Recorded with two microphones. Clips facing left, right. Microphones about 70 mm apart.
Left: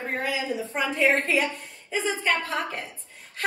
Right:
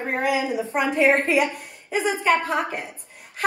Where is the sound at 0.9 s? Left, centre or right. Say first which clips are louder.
Right 4 dB; right.